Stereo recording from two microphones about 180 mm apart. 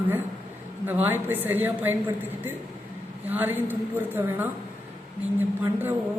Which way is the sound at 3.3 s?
10° right (ahead or behind).